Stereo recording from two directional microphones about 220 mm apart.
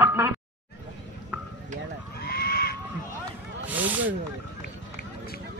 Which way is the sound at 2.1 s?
45° left (ahead or behind).